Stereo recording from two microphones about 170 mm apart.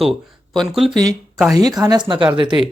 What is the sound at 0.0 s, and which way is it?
Speech, centre (ahead or behind).